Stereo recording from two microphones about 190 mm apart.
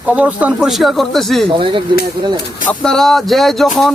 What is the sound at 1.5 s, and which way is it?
Speech, 25° right (ahead or behind).